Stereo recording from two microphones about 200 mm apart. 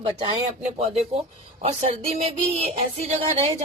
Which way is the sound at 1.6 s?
30° right (ahead or behind).